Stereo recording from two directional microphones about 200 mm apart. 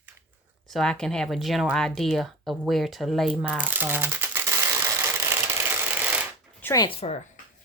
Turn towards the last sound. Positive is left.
turn(degrees=30)  # may be behind; listen again after turning